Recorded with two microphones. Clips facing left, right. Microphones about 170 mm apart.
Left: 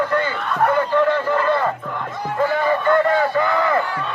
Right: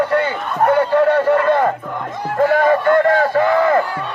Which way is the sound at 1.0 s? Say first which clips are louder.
Right 5 dB; 45° right (ahead or behind).